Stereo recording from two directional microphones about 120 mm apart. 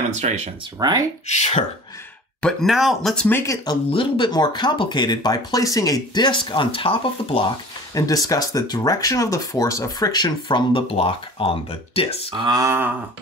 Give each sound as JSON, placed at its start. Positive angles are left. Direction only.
{"t": 0.1, "sound": "speech", "side_deg": -65}
{"t": 0.7, "sound": "speech", "side_deg": -35}
{"t": 1.2, "sound": "speech", "side_deg": 70}
{"t": 2.4, "sound": "speech", "side_deg": 0}
{"t": 3.3, "sound": "speech", "side_deg": 20}
{"t": 3.6, "sound": "speech", "side_deg": 45}
{"t": 7.9, "sound": "speech", "side_deg": 30}
{"t": 12.4, "sound": "speech", "side_deg": -35}
{"t": 12.6, "sound": "a sound", "side_deg": -20}